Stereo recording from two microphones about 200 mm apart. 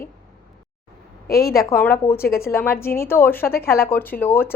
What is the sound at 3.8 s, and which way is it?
Speech, 10° left (ahead or behind).